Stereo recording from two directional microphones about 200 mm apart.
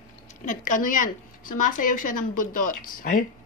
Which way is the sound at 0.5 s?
40° left (ahead or behind).